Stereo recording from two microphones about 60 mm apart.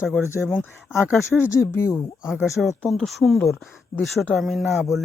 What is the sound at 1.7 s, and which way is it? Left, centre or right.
Speech, left.